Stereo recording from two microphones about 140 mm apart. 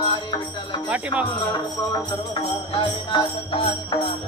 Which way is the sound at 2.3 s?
35° left (ahead or behind).